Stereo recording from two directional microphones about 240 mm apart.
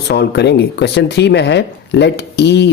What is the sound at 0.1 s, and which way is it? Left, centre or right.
Speech, left.